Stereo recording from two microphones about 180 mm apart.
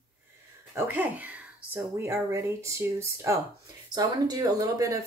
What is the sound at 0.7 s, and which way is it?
Speech, 10° right (ahead or behind).